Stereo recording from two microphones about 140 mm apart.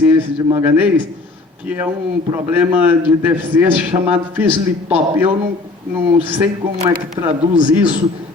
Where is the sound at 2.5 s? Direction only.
10° right (ahead or behind).